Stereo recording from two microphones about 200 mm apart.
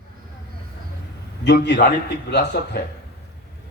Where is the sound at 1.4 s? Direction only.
60° left (ahead or behind).